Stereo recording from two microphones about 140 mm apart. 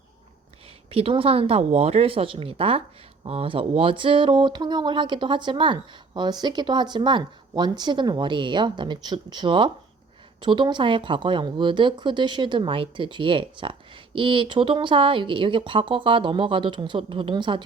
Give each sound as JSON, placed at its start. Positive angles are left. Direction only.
{"t": 0.9, "sound": "speech", "side_deg": -45}